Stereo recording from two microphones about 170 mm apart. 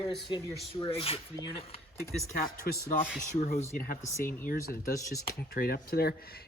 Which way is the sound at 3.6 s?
40° left (ahead or behind).